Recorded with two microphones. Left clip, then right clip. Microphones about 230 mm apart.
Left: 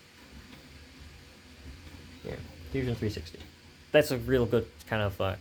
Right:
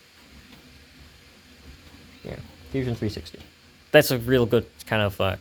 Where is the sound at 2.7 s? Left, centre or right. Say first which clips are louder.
Right 4 dB; right.